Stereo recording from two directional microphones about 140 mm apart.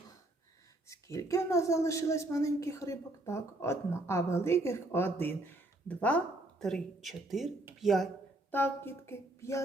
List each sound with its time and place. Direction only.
0.9 s speech: 20° left (ahead or behind); by 8.1 s centre (ahead or behind)
8.4 s speech: 15° left (ahead or behind)